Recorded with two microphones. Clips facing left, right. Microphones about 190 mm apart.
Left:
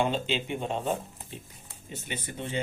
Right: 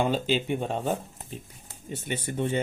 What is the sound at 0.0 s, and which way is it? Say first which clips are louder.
Speech: right 3 dB; 40° right (ahead or behind).